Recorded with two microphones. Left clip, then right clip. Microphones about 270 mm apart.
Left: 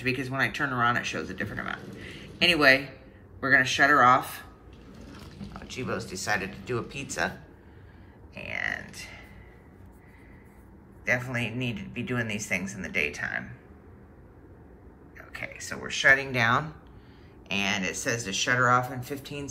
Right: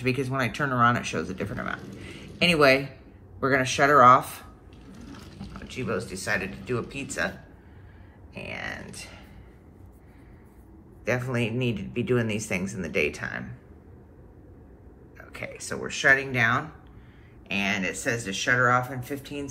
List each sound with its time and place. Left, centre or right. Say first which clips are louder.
0.0 s speech: right 1 dB; centre
5.4 s speech: right 1 dB; centre
8.4 s speech: left 3 dB; centre
11.1 s speech: even; centre
15.1 s speech: even; centre
15.8 s speech: even; centre
18.0 s speech: right 1 dB; centre